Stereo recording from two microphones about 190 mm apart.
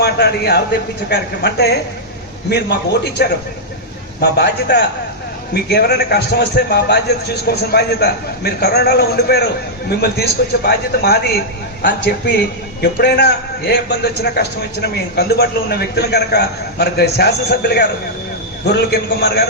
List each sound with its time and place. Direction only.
0.0 s a man's voice: 60° left (ahead or behind)